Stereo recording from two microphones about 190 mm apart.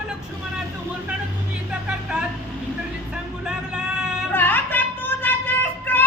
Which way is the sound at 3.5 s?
5° right (ahead or behind).